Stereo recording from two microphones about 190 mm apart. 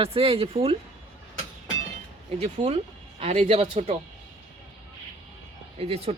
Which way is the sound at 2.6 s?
20° right (ahead or behind).